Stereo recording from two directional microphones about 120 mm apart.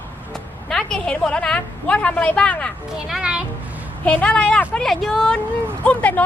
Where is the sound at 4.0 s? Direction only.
10° left (ahead or behind).